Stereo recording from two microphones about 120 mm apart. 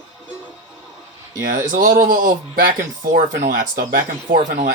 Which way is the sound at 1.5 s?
90° right.